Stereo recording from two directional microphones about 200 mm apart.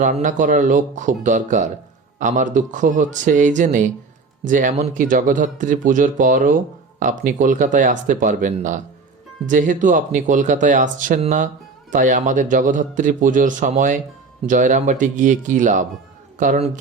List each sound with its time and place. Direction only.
0.0 s speech: 40° right (ahead or behind)